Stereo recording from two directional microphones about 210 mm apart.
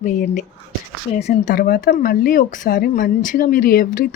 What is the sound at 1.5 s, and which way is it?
Speech, 45° left (ahead or behind).